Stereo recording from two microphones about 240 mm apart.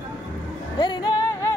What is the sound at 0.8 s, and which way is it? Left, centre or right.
Music, centre.